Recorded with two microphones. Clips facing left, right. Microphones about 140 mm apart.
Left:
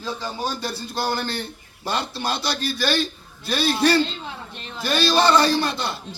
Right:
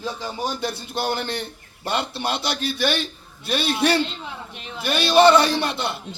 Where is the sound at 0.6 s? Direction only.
20° right (ahead or behind).